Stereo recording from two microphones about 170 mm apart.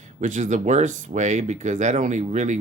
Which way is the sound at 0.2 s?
45° right (ahead or behind).